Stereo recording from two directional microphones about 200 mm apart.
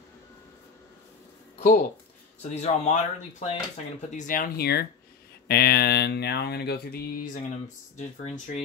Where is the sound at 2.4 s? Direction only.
35° left (ahead or behind).